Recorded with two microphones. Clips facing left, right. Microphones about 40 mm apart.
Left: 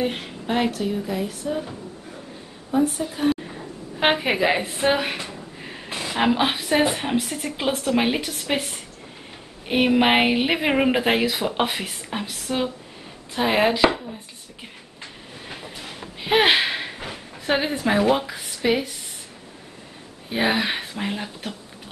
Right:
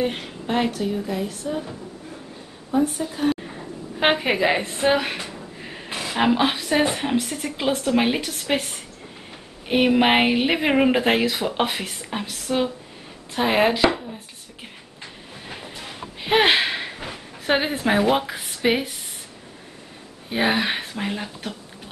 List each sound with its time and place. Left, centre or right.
0.0 s a woman's voice: centre
14.6 s a sound: centre
17.5 s speech: centre
20.2 s speech: centre